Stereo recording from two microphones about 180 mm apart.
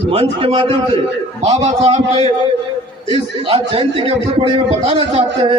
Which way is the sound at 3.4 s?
30° right (ahead or behind).